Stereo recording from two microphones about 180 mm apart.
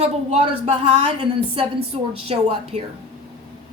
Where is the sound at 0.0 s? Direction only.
40° right (ahead or behind).